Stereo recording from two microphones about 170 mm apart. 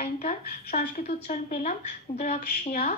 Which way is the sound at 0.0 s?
40° left (ahead or behind).